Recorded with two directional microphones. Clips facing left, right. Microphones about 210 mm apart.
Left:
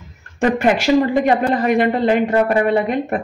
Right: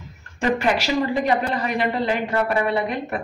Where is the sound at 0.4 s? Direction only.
50° left (ahead or behind).